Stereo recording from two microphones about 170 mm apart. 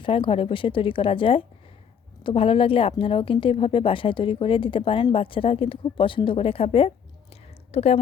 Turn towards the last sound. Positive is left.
turn(degrees=35)  # may be behind; listen again after turning